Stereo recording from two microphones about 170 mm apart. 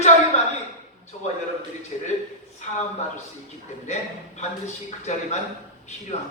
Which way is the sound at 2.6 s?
40° left (ahead or behind).